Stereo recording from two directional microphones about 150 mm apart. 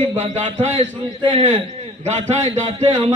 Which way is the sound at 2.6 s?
50° right (ahead or behind).